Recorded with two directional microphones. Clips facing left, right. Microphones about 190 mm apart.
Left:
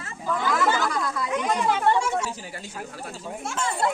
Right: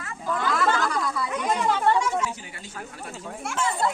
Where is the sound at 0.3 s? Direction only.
5° left (ahead or behind).